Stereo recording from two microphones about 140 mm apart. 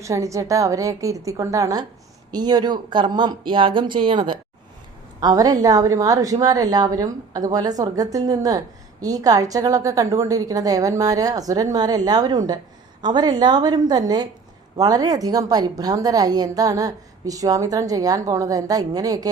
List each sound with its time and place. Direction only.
0.0 s a woman's voice: 20° right (ahead or behind)